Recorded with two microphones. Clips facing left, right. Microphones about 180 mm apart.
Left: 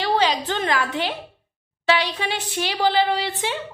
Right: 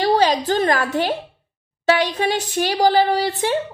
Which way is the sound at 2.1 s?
45° right (ahead or behind).